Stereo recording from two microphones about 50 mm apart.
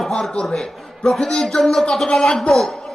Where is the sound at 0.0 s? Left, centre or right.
Centre.